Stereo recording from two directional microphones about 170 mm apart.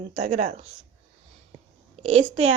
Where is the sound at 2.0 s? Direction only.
40° right (ahead or behind).